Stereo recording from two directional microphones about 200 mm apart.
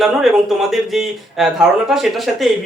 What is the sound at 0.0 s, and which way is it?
Speech, centre (ahead or behind).